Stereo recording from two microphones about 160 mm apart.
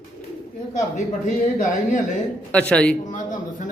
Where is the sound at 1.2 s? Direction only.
50° left (ahead or behind).